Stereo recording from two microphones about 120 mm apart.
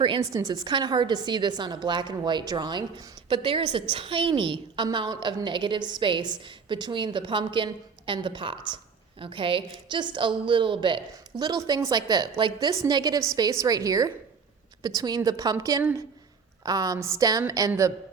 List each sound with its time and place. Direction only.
0.3 s a woman's voice: 35° right (ahead or behind)